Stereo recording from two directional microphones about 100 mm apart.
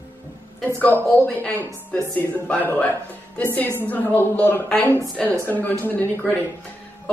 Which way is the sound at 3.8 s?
20° left (ahead or behind).